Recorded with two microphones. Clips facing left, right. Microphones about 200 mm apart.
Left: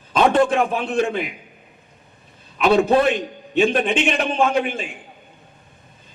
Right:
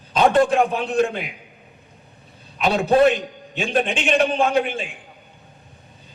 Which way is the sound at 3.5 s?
55° left (ahead or behind).